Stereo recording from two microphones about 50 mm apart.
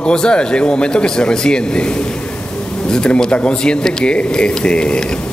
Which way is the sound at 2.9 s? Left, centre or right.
Centre.